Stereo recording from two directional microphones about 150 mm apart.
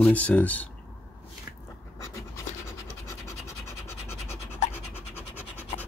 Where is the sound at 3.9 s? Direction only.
15° left (ahead or behind).